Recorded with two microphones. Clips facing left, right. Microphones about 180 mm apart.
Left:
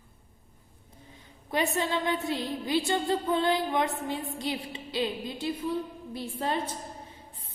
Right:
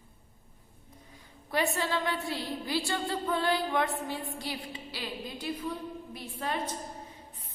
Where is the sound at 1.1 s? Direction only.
20° left (ahead or behind).